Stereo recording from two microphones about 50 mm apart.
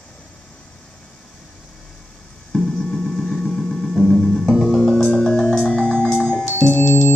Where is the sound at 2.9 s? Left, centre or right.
Centre.